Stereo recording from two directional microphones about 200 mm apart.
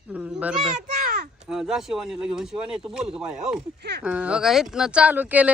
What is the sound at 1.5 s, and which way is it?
Speech, centre (ahead or behind).